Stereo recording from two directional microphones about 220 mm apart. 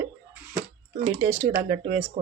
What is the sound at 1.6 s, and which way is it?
Speech, 40° right (ahead or behind).